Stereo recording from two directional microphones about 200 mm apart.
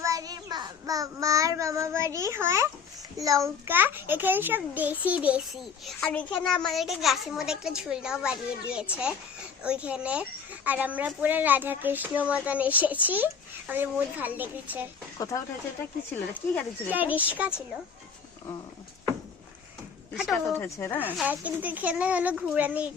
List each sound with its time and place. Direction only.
0.0 s child singing: 15° right (ahead or behind)
3.2 s a child's voice: 15° right (ahead or behind)
15.2 s speech: 15° left (ahead or behind)
16.9 s a child's voice: 10° right (ahead or behind)
20.1 s speech: centre (ahead or behind)
21.0 s a child's voice: 10° right (ahead or behind)